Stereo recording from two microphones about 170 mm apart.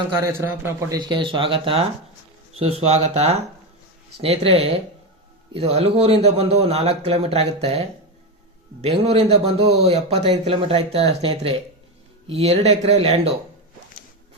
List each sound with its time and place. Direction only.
0.2 s a man's voice: 15° right (ahead or behind)
0.9 s speech: 25° right (ahead or behind)